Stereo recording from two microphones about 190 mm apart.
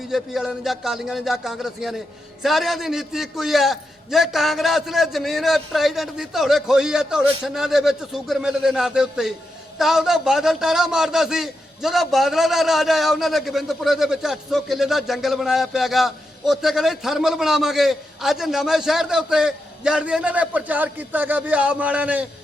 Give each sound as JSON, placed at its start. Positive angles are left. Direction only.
{"t": 0.1, "sound": "a man's voice", "side_deg": 0}